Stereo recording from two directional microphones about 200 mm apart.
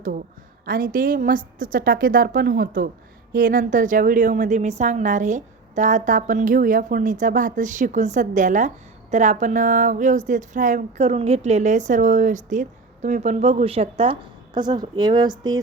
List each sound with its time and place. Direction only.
0.6 s a woman's voice: 45° right (ahead or behind); by 15.6 s 20° right (ahead or behind)